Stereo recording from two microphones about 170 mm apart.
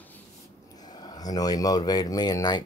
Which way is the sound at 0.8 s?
25° left (ahead or behind).